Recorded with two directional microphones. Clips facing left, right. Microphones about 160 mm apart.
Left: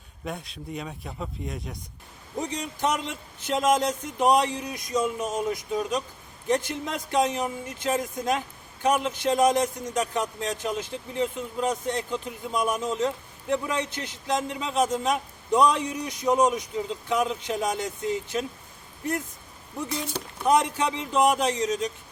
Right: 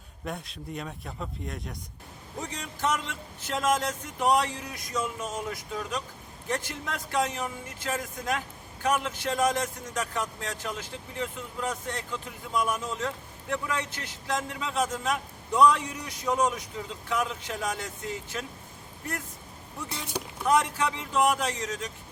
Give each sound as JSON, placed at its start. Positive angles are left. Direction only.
{"t": 0.3, "sound": "speech", "side_deg": 0}
{"t": 2.4, "sound": "speech", "side_deg": 20}
{"t": 20.4, "sound": "speech", "side_deg": 20}